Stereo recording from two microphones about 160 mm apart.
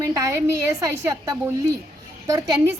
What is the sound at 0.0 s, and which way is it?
A woman's voice, 20° right (ahead or behind).